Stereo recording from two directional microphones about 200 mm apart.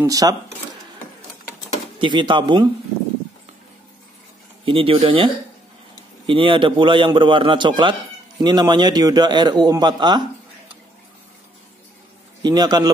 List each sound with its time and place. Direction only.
0.0 s speech: 15° right (ahead or behind)
2.0 s a man's voice: 25° right (ahead or behind)
4.6 s a man's voice: 25° right (ahead or behind)
12.4 s a man's voice: 20° right (ahead or behind)